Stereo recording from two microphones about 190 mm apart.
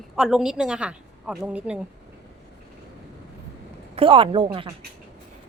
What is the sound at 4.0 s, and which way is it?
Speech, 25° right (ahead or behind).